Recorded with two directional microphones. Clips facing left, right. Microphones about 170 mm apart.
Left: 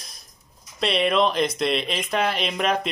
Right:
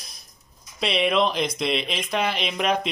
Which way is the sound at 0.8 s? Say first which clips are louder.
Left 1 dB; centre (ahead or behind).